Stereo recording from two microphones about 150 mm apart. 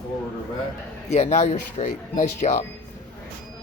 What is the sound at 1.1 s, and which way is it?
Speech, 45° left (ahead or behind).